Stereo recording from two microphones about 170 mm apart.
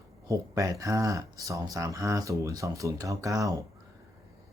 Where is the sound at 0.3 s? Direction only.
20° right (ahead or behind).